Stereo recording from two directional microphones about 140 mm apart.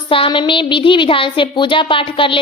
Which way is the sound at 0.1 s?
35° left (ahead or behind).